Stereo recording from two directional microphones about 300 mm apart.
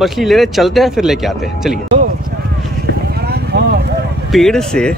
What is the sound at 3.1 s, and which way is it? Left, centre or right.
Vehicle, right.